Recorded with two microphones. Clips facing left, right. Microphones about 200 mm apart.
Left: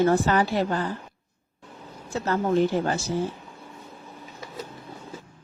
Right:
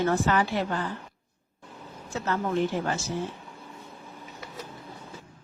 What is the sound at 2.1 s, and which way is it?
Speech, 35° left (ahead or behind).